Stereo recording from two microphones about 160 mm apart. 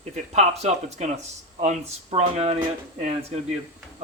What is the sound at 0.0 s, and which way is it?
Speech, 45° right (ahead or behind).